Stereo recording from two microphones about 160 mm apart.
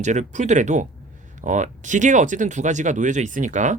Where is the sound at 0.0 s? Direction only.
45° right (ahead or behind).